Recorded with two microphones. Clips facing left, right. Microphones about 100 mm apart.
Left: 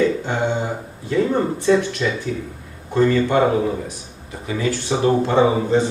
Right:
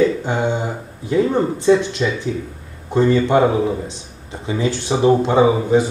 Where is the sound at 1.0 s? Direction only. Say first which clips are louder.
Right 2 dB; 20° right (ahead or behind).